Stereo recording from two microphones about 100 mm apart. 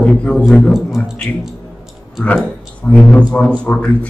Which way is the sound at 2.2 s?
15° left (ahead or behind).